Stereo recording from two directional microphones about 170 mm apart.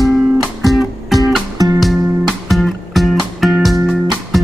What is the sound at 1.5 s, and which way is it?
Music, 20° right (ahead or behind).